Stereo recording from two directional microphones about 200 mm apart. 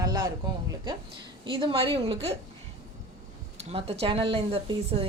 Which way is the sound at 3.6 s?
30° right (ahead or behind).